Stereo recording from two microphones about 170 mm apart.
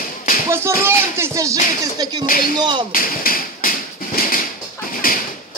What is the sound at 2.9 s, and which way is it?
Speech, 55° left (ahead or behind).